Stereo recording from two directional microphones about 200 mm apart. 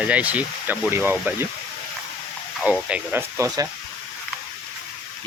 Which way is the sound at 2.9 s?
10° right (ahead or behind).